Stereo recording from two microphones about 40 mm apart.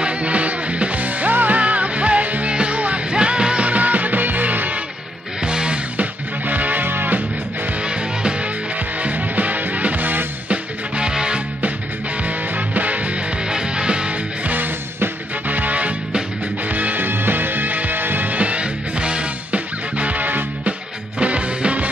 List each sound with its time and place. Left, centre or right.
0.0 s music: right
1.6 s music: right
5.4 s music: right
5.9 s music: right
7.8 s music: right
9.0 s music: right
10.5 s music: right
12.2 s music: right
13.4 s music: right
17.0 s music: right
21.2 s music: right